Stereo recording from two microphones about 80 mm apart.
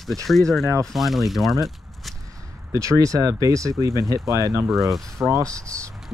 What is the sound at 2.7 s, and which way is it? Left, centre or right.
Speech, right.